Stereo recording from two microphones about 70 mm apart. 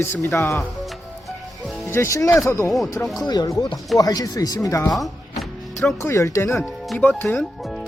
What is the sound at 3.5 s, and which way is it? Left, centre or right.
Speech, left.